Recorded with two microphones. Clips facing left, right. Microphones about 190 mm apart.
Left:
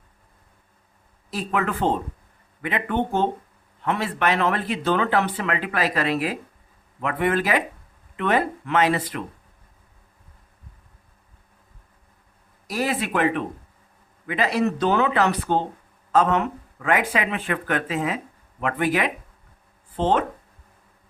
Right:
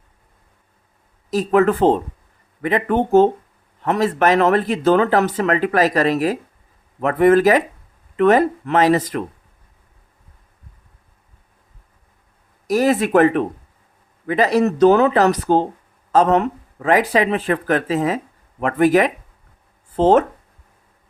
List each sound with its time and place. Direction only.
1.3 s speech: 40° right (ahead or behind)
12.6 s speech: 45° right (ahead or behind)